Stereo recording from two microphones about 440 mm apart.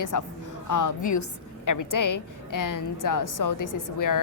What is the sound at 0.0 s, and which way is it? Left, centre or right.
A woman's voice, left.